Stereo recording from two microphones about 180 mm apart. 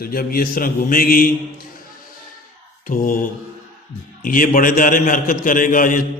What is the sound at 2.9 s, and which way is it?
Speech, 50° left (ahead or behind).